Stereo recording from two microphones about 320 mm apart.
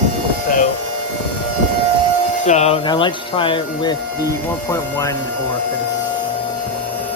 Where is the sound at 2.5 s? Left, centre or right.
Centre.